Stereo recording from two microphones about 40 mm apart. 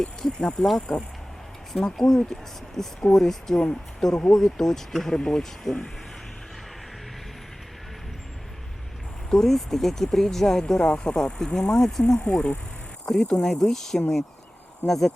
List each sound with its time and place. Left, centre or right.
0.0 s speech: centre
2.0 s speech: centre
9.3 s speech: centre
12.2 s speech: left
13.1 s speech: centre